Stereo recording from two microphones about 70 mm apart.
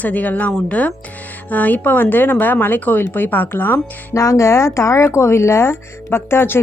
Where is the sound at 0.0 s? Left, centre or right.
Left.